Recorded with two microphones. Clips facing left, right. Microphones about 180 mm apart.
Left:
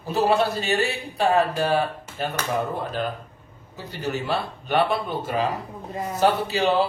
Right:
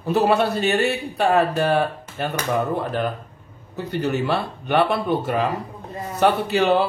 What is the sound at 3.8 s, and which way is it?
A man's voice, 65° right (ahead or behind).